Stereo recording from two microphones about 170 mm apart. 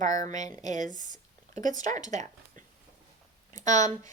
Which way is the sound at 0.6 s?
45° right (ahead or behind).